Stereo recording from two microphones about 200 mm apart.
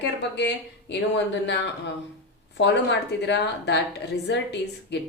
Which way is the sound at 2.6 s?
60° left (ahead or behind).